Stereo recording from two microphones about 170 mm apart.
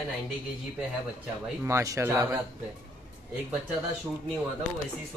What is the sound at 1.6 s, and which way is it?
Speech, 15° right (ahead or behind).